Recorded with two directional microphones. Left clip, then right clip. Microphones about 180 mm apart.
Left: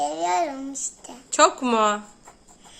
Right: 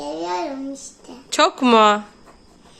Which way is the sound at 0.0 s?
35° left (ahead or behind).